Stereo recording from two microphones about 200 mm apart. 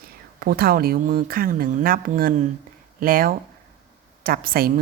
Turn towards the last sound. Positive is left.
turn(degrees=-45)  # may be behind; listen again after turning